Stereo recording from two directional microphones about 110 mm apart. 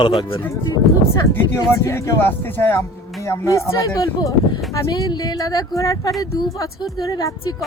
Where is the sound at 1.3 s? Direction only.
20° left (ahead or behind).